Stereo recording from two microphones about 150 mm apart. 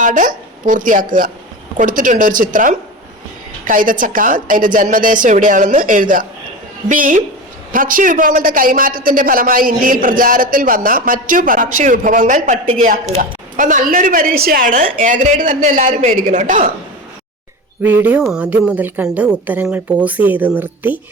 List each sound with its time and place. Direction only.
0.0 s a woman's voice: 60° right (ahead or behind)
13.6 s a woman's voice: 60° right (ahead or behind)
17.8 s a woman's voice: 10° right (ahead or behind)